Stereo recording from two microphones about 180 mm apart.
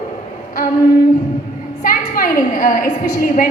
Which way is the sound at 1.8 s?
55° left (ahead or behind).